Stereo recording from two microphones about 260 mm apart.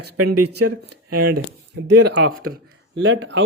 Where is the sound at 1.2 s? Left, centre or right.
Right.